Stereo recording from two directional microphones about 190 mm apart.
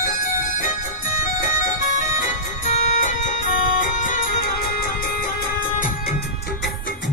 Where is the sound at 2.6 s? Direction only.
40° left (ahead or behind).